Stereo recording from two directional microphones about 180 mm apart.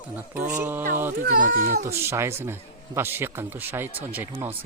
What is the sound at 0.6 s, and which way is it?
Speech, 10° right (ahead or behind).